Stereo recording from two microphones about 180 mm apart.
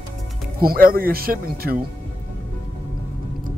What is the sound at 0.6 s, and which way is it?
Speech, 55° right (ahead or behind).